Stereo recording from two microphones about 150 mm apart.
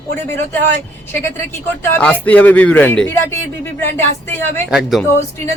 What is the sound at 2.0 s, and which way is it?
Speech, 10° left (ahead or behind).